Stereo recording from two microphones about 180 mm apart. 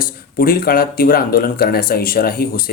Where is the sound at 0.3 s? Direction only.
50° left (ahead or behind).